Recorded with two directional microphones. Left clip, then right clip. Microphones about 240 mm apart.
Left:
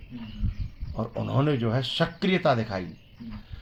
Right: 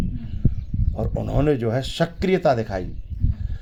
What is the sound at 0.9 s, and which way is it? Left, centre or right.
Speech, right.